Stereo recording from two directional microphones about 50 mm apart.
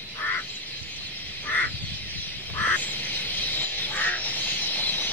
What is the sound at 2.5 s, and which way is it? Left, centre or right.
Duck, left.